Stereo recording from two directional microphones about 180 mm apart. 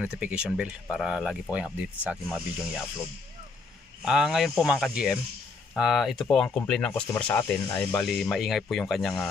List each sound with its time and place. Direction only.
0.0 s speech: 5° right (ahead or behind)
4.0 s speech: centre (ahead or behind)